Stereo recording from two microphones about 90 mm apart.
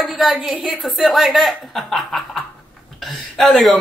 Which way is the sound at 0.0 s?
Centre (ahead or behind).